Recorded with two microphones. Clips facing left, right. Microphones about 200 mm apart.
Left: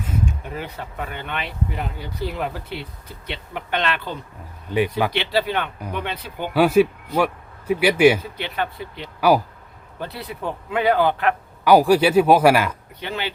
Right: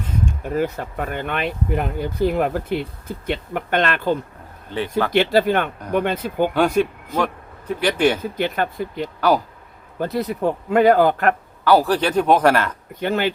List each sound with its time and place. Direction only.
0.0 s a sound: 10° left (ahead or behind)
0.4 s speech: 45° right (ahead or behind)
4.7 s speech: 10° left (ahead or behind)
5.1 s speech: 45° right (ahead or behind)
6.5 s speech: 5° left (ahead or behind)
8.2 s speech: 45° right (ahead or behind)
11.6 s speech: 10° left (ahead or behind)
12.9 s speech: 50° right (ahead or behind)